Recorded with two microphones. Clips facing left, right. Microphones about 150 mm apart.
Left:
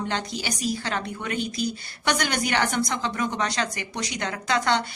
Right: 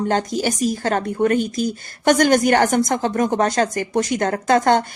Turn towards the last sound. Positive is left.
turn(degrees=-45)  # may be behind; listen again after turning